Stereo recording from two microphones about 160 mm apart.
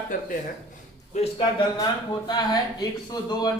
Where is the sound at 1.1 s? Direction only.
35° left (ahead or behind).